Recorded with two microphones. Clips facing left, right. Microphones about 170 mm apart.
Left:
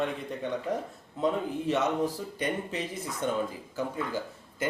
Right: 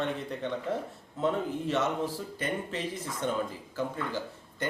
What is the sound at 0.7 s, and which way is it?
Speech, 15° left (ahead or behind).